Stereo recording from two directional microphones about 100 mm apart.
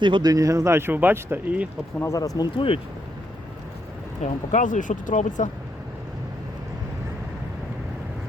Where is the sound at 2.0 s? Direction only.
30° left (ahead or behind).